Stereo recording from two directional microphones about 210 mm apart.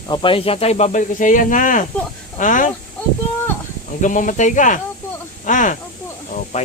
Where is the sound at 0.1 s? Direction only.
25° left (ahead or behind).